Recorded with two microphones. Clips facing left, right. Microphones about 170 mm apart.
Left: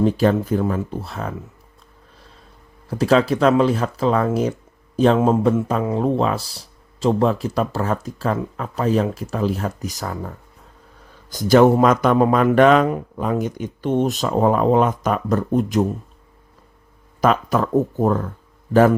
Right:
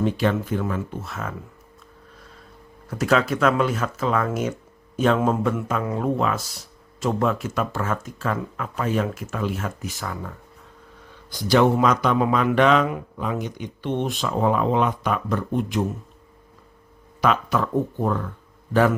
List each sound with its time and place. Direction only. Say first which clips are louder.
0.0 s speech: left 5 dB; 35° left (ahead or behind)
2.9 s speech: left 4 dB; 30° left (ahead or behind)
17.2 s speech: left 4 dB; 45° left (ahead or behind)